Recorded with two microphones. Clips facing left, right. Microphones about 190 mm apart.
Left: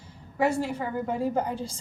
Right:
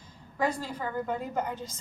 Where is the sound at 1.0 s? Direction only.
30° left (ahead or behind).